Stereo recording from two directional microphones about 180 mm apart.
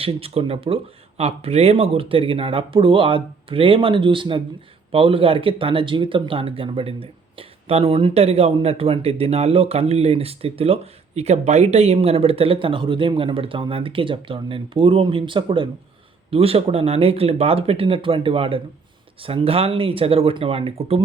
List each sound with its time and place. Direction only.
0.0 s speech: 30° right (ahead or behind)